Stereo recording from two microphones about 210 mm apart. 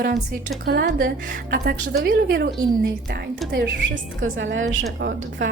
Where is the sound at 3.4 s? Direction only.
Centre (ahead or behind).